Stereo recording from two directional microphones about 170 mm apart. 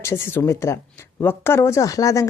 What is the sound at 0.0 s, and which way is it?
A woman's voice, 15° left (ahead or behind).